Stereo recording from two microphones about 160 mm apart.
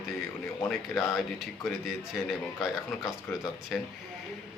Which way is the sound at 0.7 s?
Centre (ahead or behind).